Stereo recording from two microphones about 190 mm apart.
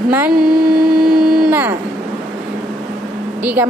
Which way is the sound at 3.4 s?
10° right (ahead or behind).